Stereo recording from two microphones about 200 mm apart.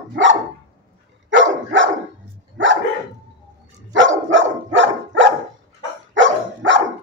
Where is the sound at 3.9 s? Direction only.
70° right (ahead or behind).